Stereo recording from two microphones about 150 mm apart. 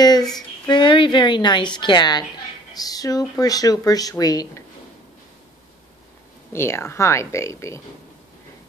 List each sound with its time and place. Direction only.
0.0 s a sound: 25° left (ahead or behind)
0.7 s a woman's voice: 30° left (ahead or behind)
6.5 s speech: 15° left (ahead or behind)